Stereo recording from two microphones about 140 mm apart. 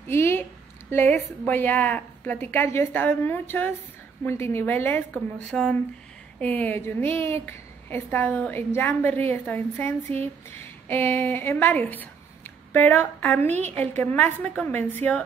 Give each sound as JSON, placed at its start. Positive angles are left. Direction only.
{"t": 0.1, "sound": "a woman's voice", "side_deg": 15}
{"t": 13.5, "sound": "a woman's voice", "side_deg": -55}
{"t": 14.1, "sound": "a woman's voice", "side_deg": 10}